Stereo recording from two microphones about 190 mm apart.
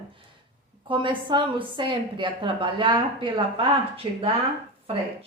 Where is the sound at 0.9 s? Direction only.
25° right (ahead or behind).